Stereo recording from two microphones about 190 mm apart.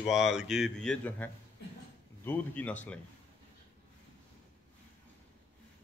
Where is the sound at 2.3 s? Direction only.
10° left (ahead or behind).